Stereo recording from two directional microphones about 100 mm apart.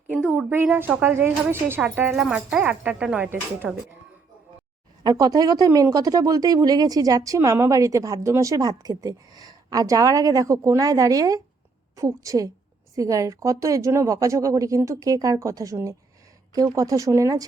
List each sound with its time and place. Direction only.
0.1 s a woman's voice: 15° right (ahead or behind)
2.1 s a woman's voice: 5° right (ahead or behind)
3.2 s a woman's voice: 20° right (ahead or behind)
5.0 s speech: 40° right (ahead or behind)